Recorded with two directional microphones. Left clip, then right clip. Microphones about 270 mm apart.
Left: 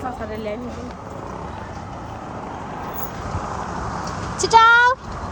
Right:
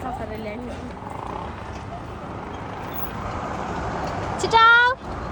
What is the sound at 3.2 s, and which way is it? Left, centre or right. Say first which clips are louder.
Vehicle: even; right.